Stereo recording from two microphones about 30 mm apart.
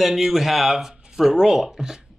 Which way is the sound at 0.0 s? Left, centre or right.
Centre.